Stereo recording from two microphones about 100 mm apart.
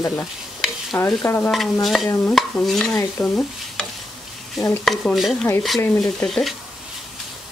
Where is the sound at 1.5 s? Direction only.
Centre (ahead or behind).